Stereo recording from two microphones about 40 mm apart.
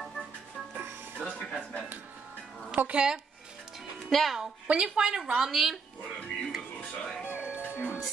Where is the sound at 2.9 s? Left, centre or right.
Right.